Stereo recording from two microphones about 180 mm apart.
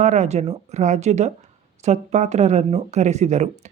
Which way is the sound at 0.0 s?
40° right (ahead or behind).